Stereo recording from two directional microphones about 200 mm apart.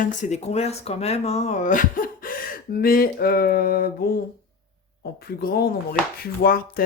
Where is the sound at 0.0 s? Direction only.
35° left (ahead or behind).